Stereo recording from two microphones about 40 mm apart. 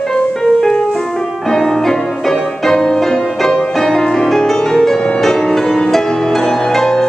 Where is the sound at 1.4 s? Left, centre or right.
Centre.